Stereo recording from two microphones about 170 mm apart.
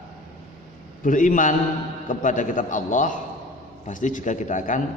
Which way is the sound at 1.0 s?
50° left (ahead or behind).